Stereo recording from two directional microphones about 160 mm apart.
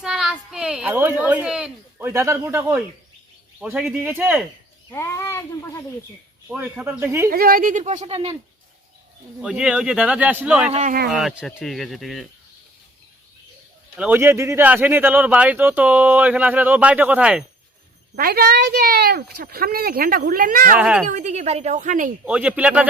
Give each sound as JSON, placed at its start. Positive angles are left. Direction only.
{"t": 0.0, "sound": "a woman's voice", "side_deg": -5}
{"t": 4.9, "sound": "a child's voice", "side_deg": 15}
{"t": 6.5, "sound": "a man's voice", "side_deg": -10}
{"t": 7.3, "sound": "a woman's voice", "side_deg": -65}
{"t": 9.4, "sound": "a man's voice", "side_deg": -5}
{"t": 10.7, "sound": "a woman's voice", "side_deg": -45}
{"t": 11.1, "sound": "speech", "side_deg": -5}
{"t": 13.9, "sound": "a man's voice", "side_deg": -10}
{"t": 18.2, "sound": "speech", "side_deg": -70}
{"t": 20.7, "sound": "a man's voice", "side_deg": -5}
{"t": 21.1, "sound": "a woman's voice", "side_deg": -50}
{"t": 22.2, "sound": "a man's voice", "side_deg": -10}